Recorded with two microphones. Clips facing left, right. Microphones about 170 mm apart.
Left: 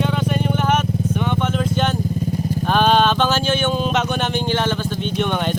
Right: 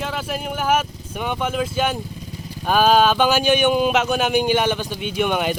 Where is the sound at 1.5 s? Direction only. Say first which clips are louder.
Left 1 dB; 5° right (ahead or behind).